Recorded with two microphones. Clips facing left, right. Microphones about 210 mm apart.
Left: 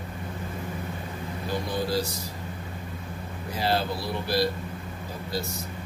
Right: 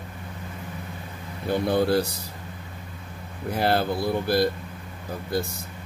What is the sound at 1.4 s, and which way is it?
Speech, 60° right (ahead or behind).